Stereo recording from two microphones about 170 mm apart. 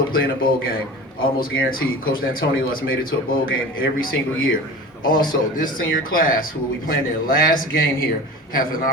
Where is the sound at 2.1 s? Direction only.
60° left (ahead or behind).